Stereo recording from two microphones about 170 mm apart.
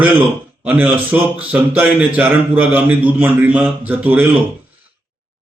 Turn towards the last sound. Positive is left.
turn(degrees=-10)  # may be behind; listen again after turning